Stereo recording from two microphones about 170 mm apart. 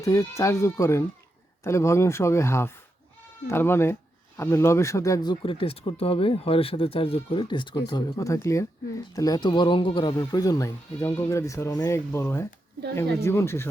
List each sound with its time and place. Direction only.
0.0 s speech: 20° left (ahead or behind)